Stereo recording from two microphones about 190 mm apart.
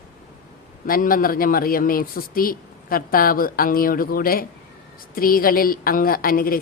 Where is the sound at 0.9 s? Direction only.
50° left (ahead or behind).